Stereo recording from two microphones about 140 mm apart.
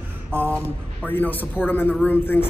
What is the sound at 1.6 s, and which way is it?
Speech, 15° left (ahead or behind).